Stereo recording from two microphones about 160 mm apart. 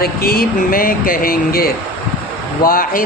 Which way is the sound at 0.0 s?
70° left (ahead or behind).